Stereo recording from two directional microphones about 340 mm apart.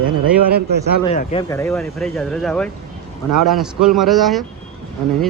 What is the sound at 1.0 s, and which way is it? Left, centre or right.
Speech, centre.